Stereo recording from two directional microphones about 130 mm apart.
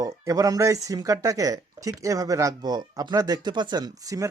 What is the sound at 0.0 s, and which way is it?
Speech, 25° right (ahead or behind).